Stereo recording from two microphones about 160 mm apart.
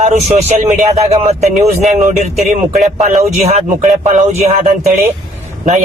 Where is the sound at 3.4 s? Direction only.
45° right (ahead or behind).